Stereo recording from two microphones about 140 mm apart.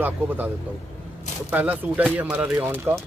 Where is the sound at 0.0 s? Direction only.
15° right (ahead or behind).